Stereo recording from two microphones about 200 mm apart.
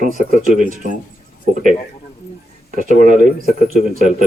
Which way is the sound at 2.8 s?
40° right (ahead or behind).